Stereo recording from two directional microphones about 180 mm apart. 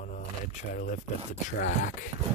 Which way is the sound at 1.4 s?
45° left (ahead or behind).